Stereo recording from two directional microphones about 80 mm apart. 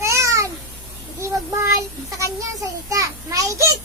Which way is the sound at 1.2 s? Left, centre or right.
Right.